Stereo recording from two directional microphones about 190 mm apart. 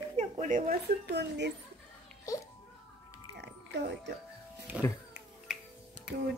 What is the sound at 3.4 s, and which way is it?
Music, 65° right (ahead or behind).